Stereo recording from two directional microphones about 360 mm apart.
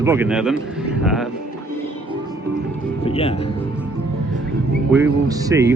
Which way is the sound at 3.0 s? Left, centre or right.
Centre.